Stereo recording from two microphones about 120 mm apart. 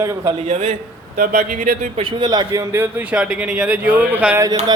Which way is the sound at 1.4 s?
75° right (ahead or behind).